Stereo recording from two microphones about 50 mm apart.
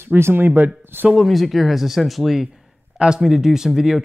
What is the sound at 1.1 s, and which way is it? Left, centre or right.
Speech, centre.